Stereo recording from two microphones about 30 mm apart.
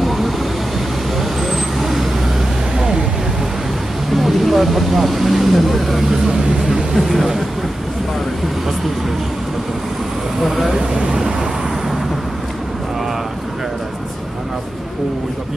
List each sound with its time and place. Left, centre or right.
0.0 s vehicle: centre
1.4 s vehicle: centre
4.1 s speech: centre
10.8 s speech: centre